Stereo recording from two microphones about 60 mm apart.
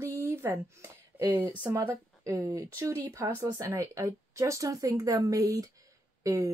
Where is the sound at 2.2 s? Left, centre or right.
Right.